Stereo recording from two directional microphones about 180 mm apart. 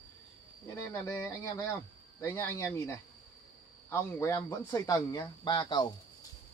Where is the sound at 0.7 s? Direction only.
15° left (ahead or behind).